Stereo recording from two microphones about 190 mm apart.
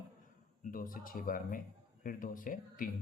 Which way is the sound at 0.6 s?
45° left (ahead or behind).